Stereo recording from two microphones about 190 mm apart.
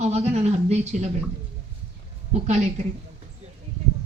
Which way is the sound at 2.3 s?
35° right (ahead or behind).